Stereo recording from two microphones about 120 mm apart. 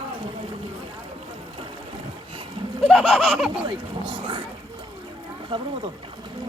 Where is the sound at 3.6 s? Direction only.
45° right (ahead or behind).